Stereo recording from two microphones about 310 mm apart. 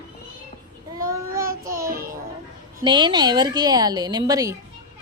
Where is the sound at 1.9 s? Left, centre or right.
Right.